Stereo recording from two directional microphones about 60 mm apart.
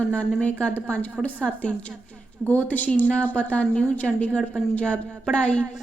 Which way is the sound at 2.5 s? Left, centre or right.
Left.